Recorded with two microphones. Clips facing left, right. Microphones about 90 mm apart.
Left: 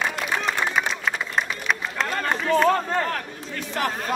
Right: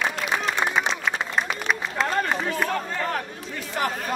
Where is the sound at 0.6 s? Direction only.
35° right (ahead or behind).